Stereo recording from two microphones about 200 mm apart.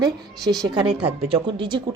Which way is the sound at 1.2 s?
25° right (ahead or behind).